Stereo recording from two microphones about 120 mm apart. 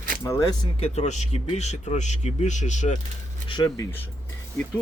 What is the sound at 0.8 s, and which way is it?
Speech, 70° left (ahead or behind).